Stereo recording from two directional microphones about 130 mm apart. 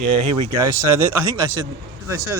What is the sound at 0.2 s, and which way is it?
Speech, 40° right (ahead or behind).